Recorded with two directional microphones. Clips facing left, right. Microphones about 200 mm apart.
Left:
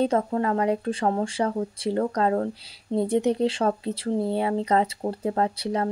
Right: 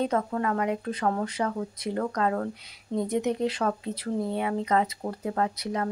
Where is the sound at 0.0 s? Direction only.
30° left (ahead or behind).